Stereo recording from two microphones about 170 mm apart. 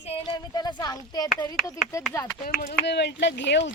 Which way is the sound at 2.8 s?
90° left.